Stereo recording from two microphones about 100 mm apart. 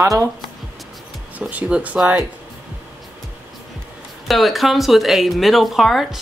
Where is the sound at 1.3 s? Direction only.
15° right (ahead or behind).